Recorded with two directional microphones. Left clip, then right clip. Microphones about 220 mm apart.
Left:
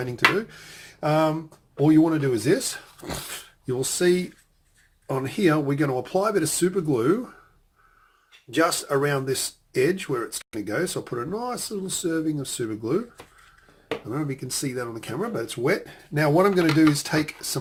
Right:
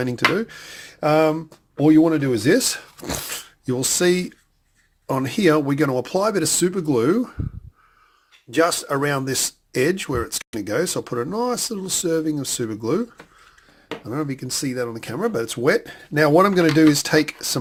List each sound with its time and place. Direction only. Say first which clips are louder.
0.0 s speech: right 2 dB; 50° right (ahead or behind)
8.4 s speech: right 3 dB; 45° right (ahead or behind)
14.1 s speech: right 7 dB; 40° right (ahead or behind)